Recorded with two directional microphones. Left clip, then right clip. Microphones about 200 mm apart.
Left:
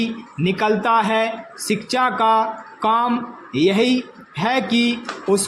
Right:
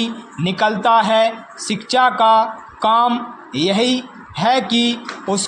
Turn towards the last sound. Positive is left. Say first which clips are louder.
# left 2 dB
turn(degrees=-15)  # may be behind; listen again after turning